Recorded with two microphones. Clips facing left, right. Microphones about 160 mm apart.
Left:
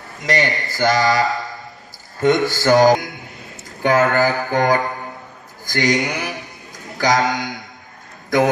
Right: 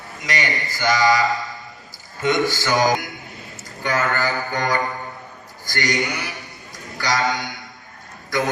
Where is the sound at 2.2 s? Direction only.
55° left (ahead or behind).